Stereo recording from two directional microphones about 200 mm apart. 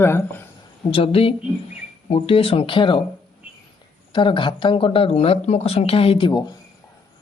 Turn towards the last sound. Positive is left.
turn(degrees=25)  # may be behind; listen again after turning